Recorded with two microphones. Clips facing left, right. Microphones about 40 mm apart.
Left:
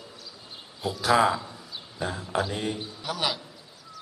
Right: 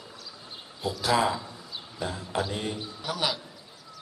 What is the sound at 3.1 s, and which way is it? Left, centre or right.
Speech, left.